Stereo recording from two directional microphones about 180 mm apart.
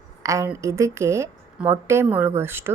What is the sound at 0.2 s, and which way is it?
A woman's voice, 15° right (ahead or behind).